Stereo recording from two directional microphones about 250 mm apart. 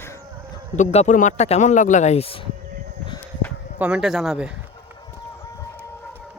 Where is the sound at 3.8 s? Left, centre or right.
Centre.